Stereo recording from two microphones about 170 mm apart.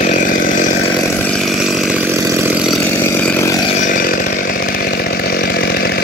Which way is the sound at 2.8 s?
15° left (ahead or behind).